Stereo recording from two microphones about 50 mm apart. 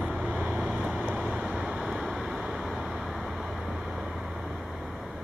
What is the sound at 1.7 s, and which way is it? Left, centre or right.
Vehicle, centre.